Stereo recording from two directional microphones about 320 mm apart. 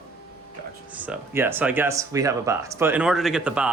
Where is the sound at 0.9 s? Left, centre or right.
Centre.